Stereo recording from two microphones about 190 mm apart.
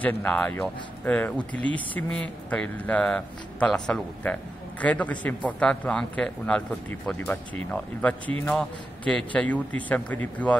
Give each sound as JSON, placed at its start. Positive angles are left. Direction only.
{"t": 0.0, "sound": "speech", "side_deg": 10}